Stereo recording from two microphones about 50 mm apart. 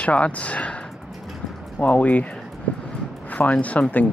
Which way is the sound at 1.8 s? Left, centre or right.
Left.